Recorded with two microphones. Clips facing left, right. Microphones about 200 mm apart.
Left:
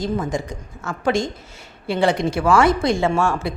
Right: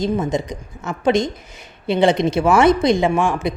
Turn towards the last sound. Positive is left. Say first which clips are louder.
# right 2 dB
turn(degrees=-15)  # may be behind; listen again after turning